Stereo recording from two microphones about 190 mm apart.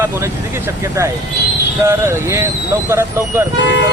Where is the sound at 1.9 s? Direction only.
15° right (ahead or behind).